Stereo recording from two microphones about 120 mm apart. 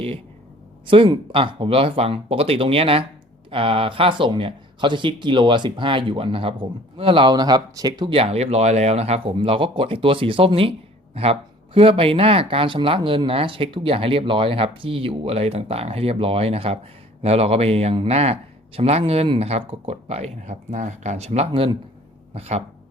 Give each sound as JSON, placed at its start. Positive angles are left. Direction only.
{"t": 0.9, "sound": "speech", "side_deg": -45}
{"t": 8.1, "sound": "speech", "side_deg": -55}